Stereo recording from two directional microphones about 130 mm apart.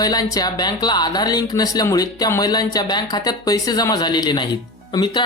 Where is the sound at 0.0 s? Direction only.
30° left (ahead or behind).